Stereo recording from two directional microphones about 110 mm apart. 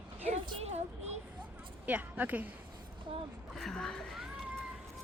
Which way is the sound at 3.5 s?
5° left (ahead or behind).